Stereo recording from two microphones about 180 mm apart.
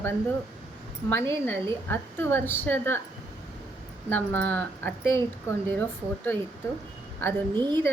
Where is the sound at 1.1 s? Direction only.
15° left (ahead or behind).